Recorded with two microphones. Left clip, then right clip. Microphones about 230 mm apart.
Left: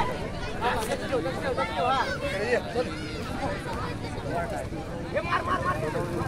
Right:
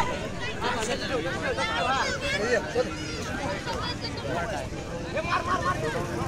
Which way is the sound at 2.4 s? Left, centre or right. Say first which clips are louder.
Right 1 dB; right.